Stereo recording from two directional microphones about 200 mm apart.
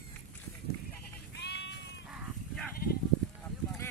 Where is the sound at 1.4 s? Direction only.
60° left (ahead or behind).